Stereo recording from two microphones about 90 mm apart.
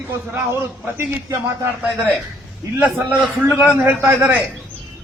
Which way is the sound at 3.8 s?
20° right (ahead or behind).